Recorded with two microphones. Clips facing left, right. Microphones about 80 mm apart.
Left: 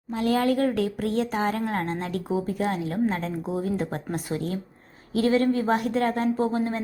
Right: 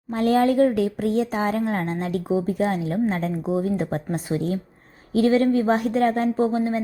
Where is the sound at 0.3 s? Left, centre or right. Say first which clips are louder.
Right 5 dB; right.